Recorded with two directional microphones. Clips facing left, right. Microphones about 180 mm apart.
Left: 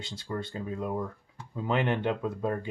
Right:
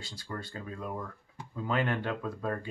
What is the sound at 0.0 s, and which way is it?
Speech, 20° left (ahead or behind).